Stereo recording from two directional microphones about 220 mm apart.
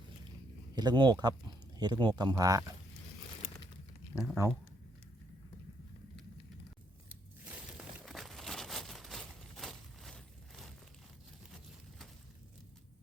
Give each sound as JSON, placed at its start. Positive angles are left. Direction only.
{"t": 0.8, "sound": "speech", "side_deg": -20}
{"t": 4.1, "sound": "speech", "side_deg": -5}
{"t": 7.4, "sound": "a sound", "side_deg": -5}